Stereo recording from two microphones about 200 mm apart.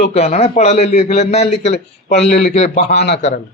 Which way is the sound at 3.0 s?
60° left (ahead or behind).